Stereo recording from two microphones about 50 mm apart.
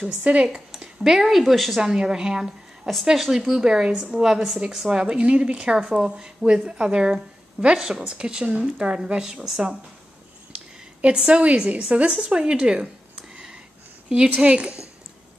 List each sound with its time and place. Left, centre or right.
0.2 s speech: right
1.0 s speech: centre
1.8 s a woman's voice: centre
8.0 s speech: right
10.5 s a sound: right
11.1 s speech: right
14.0 s speech: centre